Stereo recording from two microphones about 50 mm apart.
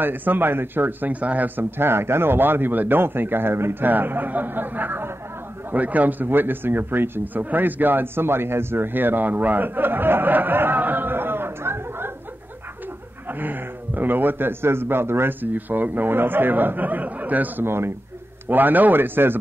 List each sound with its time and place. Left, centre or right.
0.0 s speech: right
1.2 s speech: right
1.6 s speech: right
3.8 s speech: right
13.3 s speech: right
15.4 s speech: right
17.6 s speech: right
18.5 s speech: right